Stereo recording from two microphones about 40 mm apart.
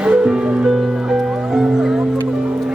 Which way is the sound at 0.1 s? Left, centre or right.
Centre.